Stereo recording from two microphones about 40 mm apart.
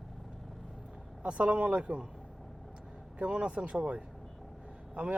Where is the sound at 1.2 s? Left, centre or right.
Right.